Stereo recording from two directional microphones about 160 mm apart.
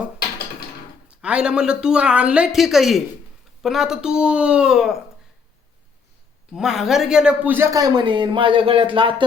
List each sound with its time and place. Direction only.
1.2 s speech: 5° right (ahead or behind)
6.5 s speech: 5° right (ahead or behind); by 9.2 s 30° right (ahead or behind)